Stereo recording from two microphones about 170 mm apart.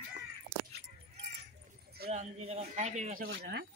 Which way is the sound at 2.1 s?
40° right (ahead or behind).